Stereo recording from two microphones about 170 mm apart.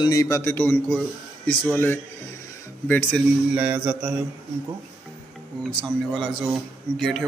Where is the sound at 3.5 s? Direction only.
10° right (ahead or behind).